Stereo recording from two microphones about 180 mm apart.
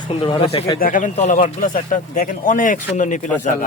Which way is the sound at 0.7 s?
50° left (ahead or behind).